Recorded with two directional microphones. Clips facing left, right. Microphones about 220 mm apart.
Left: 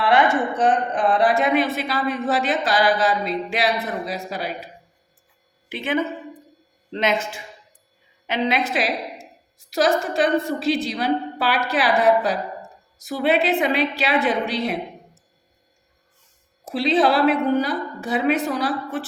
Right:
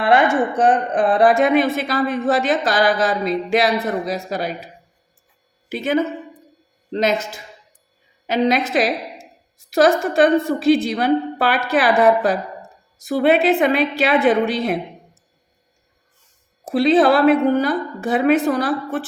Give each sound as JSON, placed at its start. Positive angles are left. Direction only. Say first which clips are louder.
{"t": 0.9, "sound": "speech", "louder": "right 4 dB", "side_deg": -50}
{"t": 5.6, "sound": "a woman's voice", "louder": "right 4 dB", "side_deg": -40}
{"t": 16.6, "sound": "speech", "louder": "right 5 dB", "side_deg": -50}